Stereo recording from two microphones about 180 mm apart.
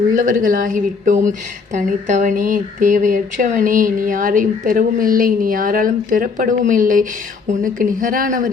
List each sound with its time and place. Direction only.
0.1 s a woman's voice: 50° right (ahead or behind)